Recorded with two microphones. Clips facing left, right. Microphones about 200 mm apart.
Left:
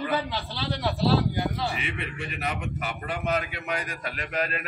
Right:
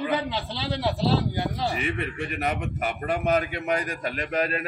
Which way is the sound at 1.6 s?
45° right (ahead or behind).